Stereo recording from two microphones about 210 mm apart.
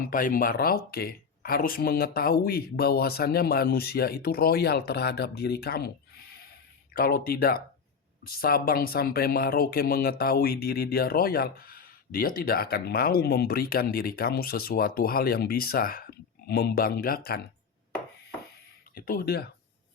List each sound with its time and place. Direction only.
0.1 s speech: 40° left (ahead or behind)
6.9 s speech: 45° left (ahead or behind)
18.9 s speech: 45° left (ahead or behind)